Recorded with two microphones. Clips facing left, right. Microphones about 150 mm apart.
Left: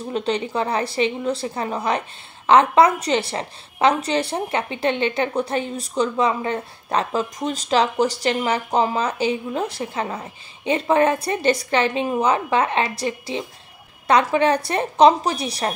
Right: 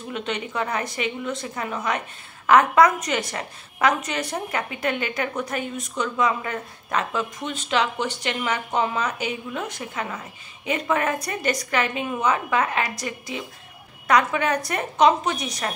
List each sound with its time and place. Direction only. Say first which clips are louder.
0.1 s a woman's voice: left 6 dB; 35° left (ahead or behind)